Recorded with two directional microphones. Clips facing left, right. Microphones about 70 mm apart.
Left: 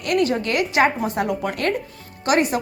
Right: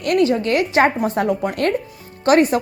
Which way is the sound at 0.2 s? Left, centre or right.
Right.